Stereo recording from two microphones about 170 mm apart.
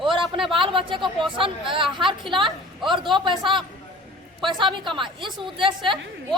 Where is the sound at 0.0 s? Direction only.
30° right (ahead or behind).